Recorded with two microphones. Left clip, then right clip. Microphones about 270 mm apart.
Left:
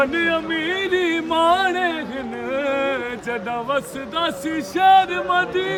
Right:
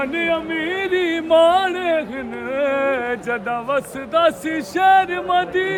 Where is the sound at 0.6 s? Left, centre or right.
Centre.